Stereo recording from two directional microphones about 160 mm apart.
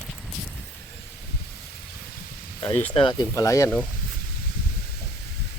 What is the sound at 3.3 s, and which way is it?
Speech, 20° left (ahead or behind).